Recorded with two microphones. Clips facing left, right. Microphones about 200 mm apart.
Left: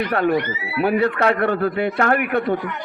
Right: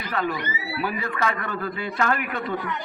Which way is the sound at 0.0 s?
60° left (ahead or behind).